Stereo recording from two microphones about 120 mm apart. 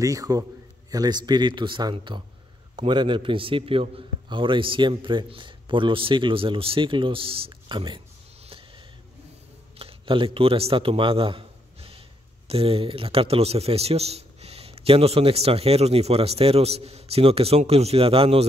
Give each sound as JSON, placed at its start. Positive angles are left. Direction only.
{"t": 0.0, "sound": "a man's voice", "side_deg": -30}
{"t": 8.5, "sound": "a sound", "side_deg": -50}
{"t": 9.8, "sound": "a man's voice", "side_deg": -50}